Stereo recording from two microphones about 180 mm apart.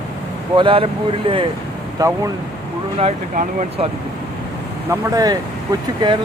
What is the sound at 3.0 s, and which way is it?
Speech, 40° right (ahead or behind).